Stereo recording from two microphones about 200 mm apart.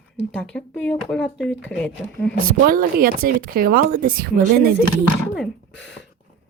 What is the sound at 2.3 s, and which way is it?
Speech, 65° left (ahead or behind).